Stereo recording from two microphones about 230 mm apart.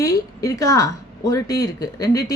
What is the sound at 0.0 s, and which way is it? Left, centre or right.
A woman's voice, centre.